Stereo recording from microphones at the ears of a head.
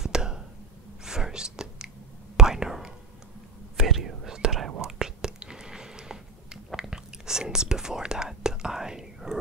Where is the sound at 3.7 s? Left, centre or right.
Right.